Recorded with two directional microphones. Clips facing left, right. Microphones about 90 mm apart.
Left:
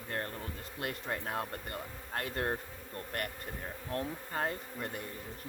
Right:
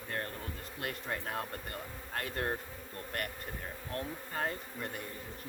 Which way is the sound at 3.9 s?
30° left (ahead or behind).